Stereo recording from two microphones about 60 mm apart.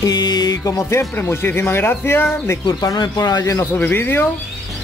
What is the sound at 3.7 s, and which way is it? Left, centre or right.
Speech, left.